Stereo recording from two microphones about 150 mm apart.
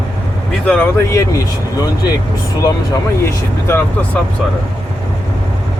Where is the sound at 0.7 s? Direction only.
15° left (ahead or behind).